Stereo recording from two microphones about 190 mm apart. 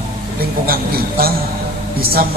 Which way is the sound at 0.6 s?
50° right (ahead or behind).